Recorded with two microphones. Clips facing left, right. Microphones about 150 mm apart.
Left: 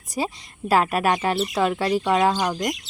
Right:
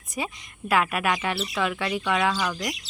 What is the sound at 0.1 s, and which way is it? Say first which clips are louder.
Speech: left 5 dB; 35° left (ahead or behind).